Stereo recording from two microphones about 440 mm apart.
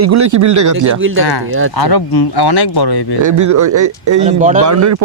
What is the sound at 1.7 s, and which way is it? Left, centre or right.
Speech, left.